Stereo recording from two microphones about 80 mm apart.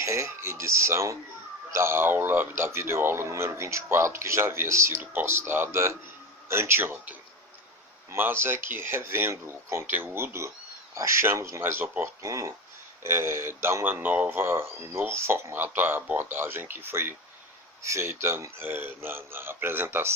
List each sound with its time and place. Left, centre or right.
0.0 s a man's voice: right
12.2 s speech: right